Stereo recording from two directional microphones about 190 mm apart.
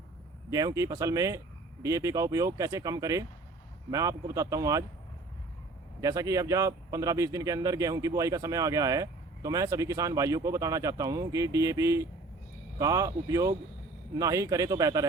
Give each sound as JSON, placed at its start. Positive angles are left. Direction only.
{"t": 0.5, "sound": "speech", "side_deg": -15}
{"t": 6.0, "sound": "speech", "side_deg": -20}